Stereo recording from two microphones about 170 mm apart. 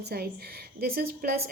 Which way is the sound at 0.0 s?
65° right (ahead or behind).